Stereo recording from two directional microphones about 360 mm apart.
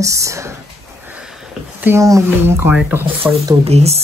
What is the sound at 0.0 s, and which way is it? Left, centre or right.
Speech, centre.